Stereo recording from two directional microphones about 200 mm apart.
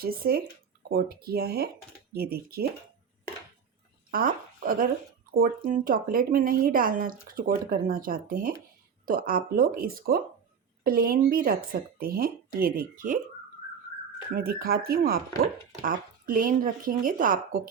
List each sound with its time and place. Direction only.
0.0 s speech: 45° right (ahead or behind)
4.1 s speech: 45° right (ahead or behind)
14.3 s speech: 50° right (ahead or behind)